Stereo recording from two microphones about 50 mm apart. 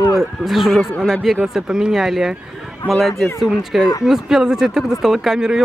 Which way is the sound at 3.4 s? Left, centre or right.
Centre.